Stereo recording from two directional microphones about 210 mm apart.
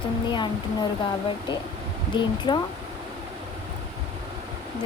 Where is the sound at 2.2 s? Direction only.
20° left (ahead or behind).